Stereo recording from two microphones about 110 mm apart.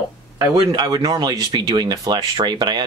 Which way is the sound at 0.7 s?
35° right (ahead or behind).